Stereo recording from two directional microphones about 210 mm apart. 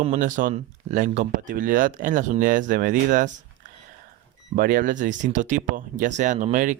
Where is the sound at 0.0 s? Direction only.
35° right (ahead or behind).